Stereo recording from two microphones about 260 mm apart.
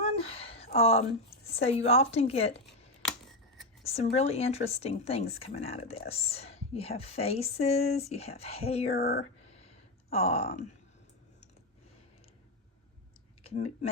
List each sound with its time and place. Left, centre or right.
0.2 s a sound: left
1.5 s speech: left
3.0 s scissors: centre
3.8 s speech: left
9.0 s speech: left
9.6 s a sound: left
13.4 s speech: left